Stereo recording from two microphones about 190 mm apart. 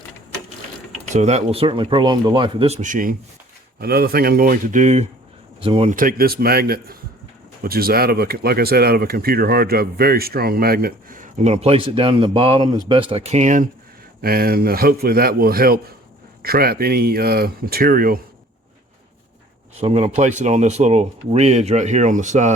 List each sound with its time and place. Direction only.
1.1 s speech: 35° right (ahead or behind)
5.6 s speech: 30° right (ahead or behind)
5.9 s speech: 50° right (ahead or behind)
14.2 s speech: 50° right (ahead or behind)
19.8 s speech: 30° right (ahead or behind)